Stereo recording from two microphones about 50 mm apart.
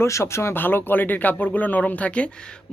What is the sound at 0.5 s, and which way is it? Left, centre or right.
A man's voice, left.